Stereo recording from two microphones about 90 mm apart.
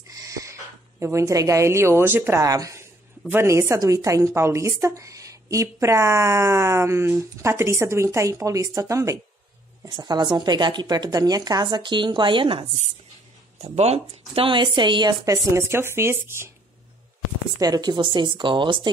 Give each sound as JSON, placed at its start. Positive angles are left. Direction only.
{"t": 0.2, "sound": "speech", "side_deg": -35}
{"t": 2.4, "sound": "speech", "side_deg": -40}
{"t": 9.8, "sound": "a woman's voice", "side_deg": -50}
{"t": 14.3, "sound": "a woman's voice", "side_deg": -75}
{"t": 15.2, "sound": "speech", "side_deg": -35}
{"t": 17.6, "sound": "a woman's voice", "side_deg": -50}